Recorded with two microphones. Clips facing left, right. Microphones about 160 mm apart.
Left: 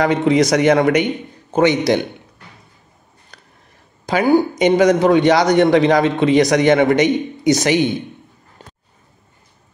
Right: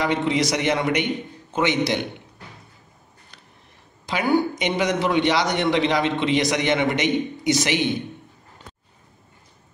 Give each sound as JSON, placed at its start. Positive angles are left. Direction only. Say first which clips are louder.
{"t": 0.0, "sound": "a man's voice", "louder": "left 7 dB", "side_deg": 45}
{"t": 4.0, "sound": "a man's voice", "louder": "left 6 dB", "side_deg": 40}